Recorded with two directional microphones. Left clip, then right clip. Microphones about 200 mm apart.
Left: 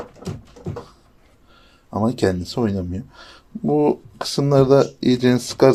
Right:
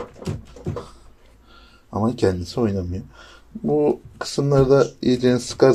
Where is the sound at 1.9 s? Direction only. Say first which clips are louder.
Left 1 dB; 20° left (ahead or behind).